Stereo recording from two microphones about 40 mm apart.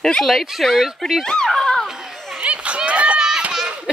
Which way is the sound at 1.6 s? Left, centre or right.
Centre.